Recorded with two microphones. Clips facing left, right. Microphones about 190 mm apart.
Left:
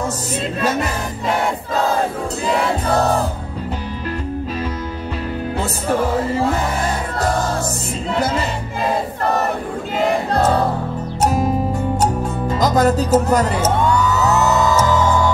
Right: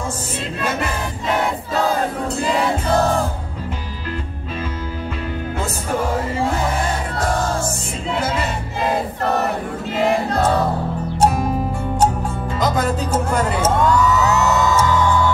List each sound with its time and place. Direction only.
12.4 s speech: 40° left (ahead or behind)